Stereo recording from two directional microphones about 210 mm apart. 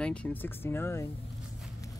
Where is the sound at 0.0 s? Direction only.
5° left (ahead or behind).